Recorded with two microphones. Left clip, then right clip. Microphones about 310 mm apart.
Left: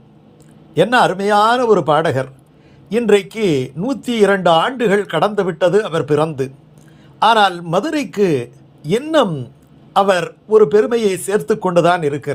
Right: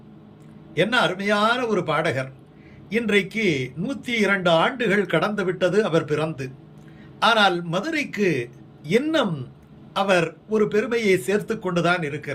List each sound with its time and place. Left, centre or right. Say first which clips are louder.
0.7 s a man's voice: left 8 dB; centre